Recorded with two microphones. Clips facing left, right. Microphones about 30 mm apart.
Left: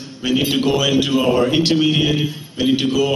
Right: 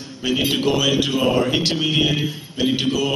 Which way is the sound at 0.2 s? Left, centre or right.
Centre.